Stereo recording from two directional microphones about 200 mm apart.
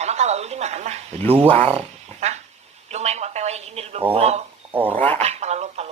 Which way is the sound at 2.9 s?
35° right (ahead or behind).